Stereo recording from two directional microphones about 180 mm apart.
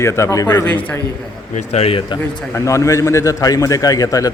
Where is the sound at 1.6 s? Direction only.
35° left (ahead or behind).